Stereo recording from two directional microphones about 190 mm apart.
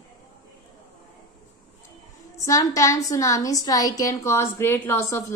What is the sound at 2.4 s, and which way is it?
A woman's voice, 15° left (ahead or behind).